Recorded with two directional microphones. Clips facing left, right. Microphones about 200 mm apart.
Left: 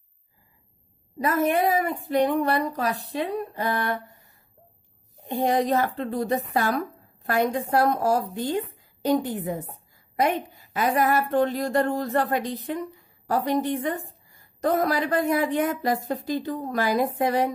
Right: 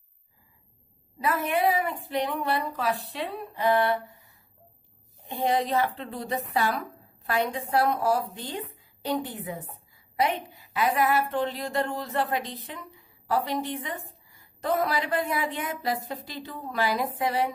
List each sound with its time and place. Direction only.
1.2 s a woman's voice: 45° left (ahead or behind)